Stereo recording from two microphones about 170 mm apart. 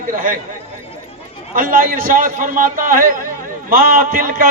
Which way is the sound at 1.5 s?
55° right (ahead or behind).